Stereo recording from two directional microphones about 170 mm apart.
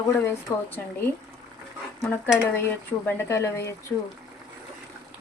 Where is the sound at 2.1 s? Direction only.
10° left (ahead or behind).